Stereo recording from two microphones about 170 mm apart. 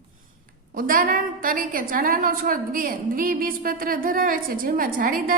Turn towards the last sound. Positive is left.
turn(degrees=-55)  # may be behind; listen again after turning